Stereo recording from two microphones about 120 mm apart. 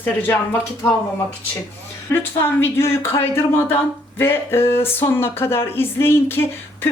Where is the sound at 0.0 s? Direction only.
15° left (ahead or behind).